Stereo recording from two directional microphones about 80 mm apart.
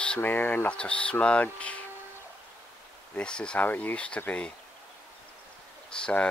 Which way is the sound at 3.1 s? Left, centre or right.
Centre.